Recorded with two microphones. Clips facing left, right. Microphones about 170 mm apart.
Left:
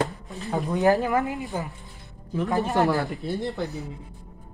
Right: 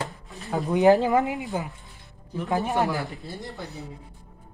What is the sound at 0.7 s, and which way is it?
Speech, 20° right (ahead or behind).